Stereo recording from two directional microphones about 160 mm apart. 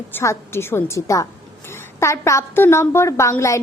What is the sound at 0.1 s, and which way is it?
A woman's voice, 15° left (ahead or behind).